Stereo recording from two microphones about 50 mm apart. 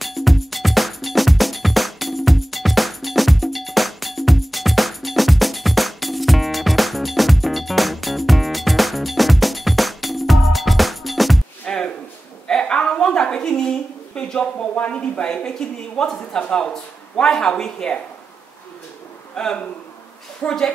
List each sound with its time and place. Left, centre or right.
0.0 s music: centre
11.6 s a sound: centre
16.0 s speech: centre
16.3 s speech: left
19.3 s a man's voice: centre